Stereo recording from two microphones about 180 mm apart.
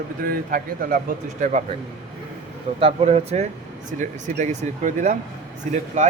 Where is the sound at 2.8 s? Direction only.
35° right (ahead or behind).